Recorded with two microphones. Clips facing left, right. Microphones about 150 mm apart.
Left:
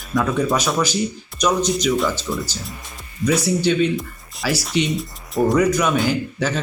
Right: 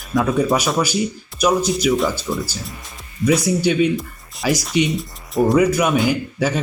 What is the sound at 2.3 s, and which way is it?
Speech, 20° right (ahead or behind).